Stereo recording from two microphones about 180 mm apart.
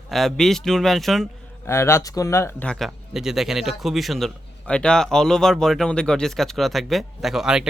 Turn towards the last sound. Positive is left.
turn(degrees=-5)  # may be behind; listen again after turning